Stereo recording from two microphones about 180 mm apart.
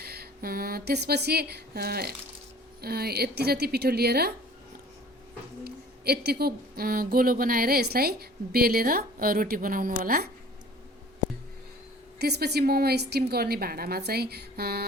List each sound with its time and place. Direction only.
0.0 s a woman's voice: 60° right (ahead or behind)
5.6 s speech: 60° right (ahead or behind)
12.2 s a woman's voice: 65° right (ahead or behind)